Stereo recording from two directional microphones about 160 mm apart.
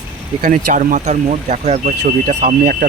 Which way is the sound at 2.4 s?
60° right (ahead or behind).